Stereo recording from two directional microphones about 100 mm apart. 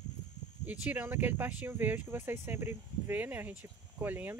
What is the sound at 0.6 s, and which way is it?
Speech, 15° right (ahead or behind).